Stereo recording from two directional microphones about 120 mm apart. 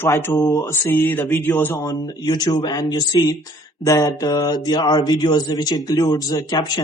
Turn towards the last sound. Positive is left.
turn(degrees=35)  # may be behind; listen again after turning